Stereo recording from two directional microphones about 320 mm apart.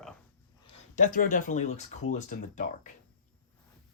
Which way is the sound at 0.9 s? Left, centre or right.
Left.